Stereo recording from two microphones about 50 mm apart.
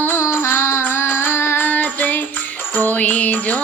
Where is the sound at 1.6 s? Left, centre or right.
Left.